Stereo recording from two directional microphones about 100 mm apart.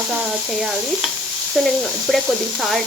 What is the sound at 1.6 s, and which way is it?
Speech, centre (ahead or behind).